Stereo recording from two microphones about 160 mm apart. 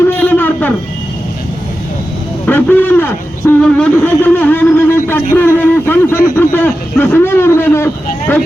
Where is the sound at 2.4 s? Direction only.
10° left (ahead or behind).